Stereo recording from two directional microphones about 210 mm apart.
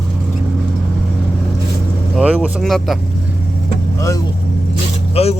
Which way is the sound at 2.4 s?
Centre (ahead or behind).